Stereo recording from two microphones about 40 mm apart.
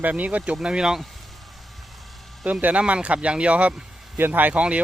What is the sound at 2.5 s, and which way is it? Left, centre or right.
Speech, right.